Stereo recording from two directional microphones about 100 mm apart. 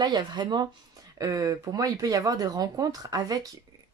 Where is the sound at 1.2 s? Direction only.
35° right (ahead or behind).